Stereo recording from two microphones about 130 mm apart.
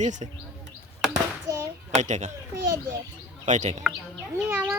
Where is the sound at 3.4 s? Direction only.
65° right (ahead or behind).